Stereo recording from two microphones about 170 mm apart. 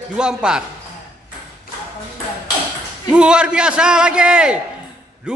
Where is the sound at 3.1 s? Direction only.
5° right (ahead or behind).